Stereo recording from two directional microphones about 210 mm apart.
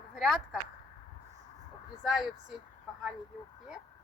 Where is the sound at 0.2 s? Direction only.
Centre (ahead or behind).